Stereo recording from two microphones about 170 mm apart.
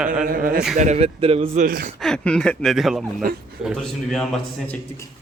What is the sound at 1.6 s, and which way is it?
Speech, 60° right (ahead or behind).